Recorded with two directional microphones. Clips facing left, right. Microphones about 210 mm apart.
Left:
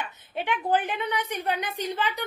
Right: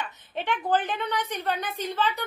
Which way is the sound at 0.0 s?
10° left (ahead or behind).